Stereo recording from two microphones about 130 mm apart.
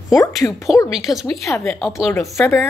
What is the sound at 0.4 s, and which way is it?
Speech, 25° left (ahead or behind).